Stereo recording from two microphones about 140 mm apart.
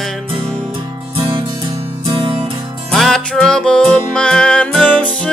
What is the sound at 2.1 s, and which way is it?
Music, 40° right (ahead or behind).